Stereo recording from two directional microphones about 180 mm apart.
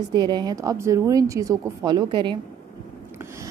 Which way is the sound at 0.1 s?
25° right (ahead or behind).